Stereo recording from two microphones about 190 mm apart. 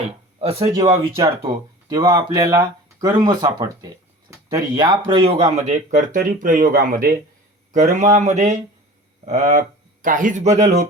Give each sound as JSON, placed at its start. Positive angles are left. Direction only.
{"t": 0.3, "sound": "speech", "side_deg": -30}
{"t": 0.8, "sound": "speech", "side_deg": -15}